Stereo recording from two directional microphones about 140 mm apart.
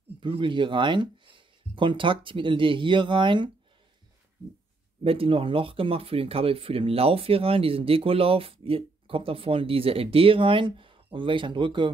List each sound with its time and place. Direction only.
0.2 s speech: 35° right (ahead or behind)
5.0 s speech: 40° right (ahead or behind)